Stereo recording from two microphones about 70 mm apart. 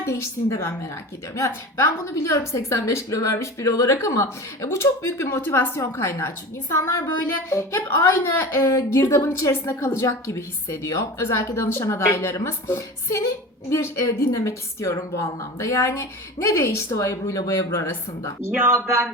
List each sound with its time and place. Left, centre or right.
0.0 s a woman's voice: left
2.2 s a woman's voice: left
5.4 s a woman's voice: left
8.6 s a woman's voice: left
18.6 s speech: right